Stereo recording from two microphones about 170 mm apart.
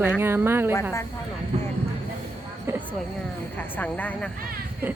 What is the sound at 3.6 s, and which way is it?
Speech, 10° left (ahead or behind).